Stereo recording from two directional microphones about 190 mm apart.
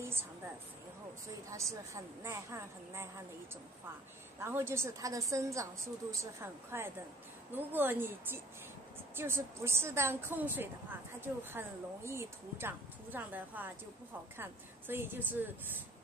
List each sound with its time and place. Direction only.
1.5 s speech: 15° right (ahead or behind)
4.4 s speech: 10° right (ahead or behind)